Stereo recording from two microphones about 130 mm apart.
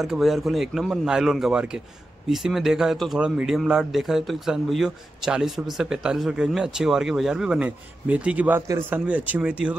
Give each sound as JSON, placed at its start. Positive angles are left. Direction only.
{"t": 0.0, "sound": "speech", "side_deg": 0}